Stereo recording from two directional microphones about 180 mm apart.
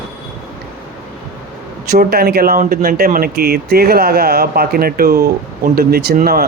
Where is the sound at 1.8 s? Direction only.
60° right (ahead or behind).